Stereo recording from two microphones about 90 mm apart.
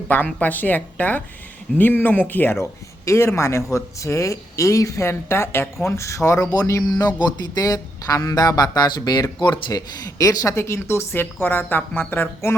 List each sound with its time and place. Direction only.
0.3 s speech: 15° left (ahead or behind); by 6.8 s 35° left (ahead or behind)
6.8 s speech: 50° left (ahead or behind)
10.2 s speech: 35° left (ahead or behind)